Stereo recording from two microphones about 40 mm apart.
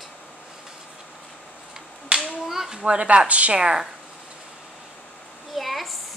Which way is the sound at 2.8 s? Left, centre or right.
Right.